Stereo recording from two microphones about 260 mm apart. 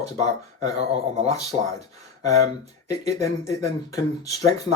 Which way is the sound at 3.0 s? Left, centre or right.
Centre.